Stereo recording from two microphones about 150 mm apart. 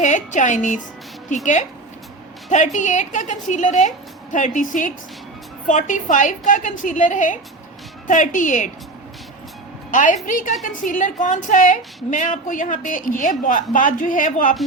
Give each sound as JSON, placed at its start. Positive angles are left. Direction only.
{"t": 0.0, "sound": "a woman's voice", "side_deg": 55}
{"t": 2.5, "sound": "a woman's voice", "side_deg": 55}
{"t": 9.9, "sound": "a woman's voice", "side_deg": 60}